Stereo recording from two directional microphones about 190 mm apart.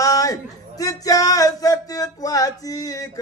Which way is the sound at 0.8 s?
20° left (ahead or behind).